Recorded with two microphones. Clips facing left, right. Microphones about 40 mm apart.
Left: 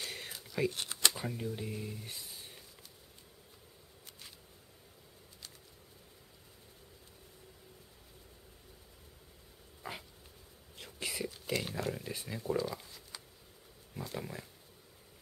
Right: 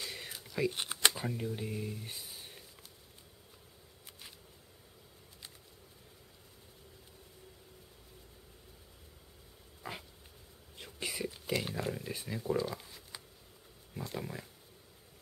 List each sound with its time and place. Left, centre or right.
0.0 s whispering: centre
0.7 s shuffling cards: centre
1.1 s speech: centre
2.0 s a sound: centre
10.8 s whispering: centre
13.9 s speech: centre